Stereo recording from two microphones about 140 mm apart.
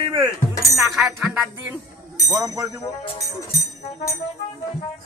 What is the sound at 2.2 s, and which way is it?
Speech, 25° right (ahead or behind).